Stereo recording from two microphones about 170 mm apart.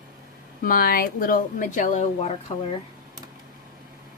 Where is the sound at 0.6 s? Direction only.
55° left (ahead or behind); by 2.3 s 40° left (ahead or behind).